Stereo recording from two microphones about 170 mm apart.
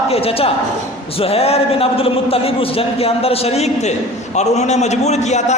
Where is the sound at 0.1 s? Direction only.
35° left (ahead or behind).